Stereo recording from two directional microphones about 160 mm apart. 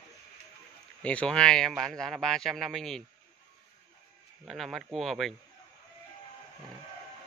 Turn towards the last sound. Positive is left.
turn(degrees=0)  # may be behind; listen again after turning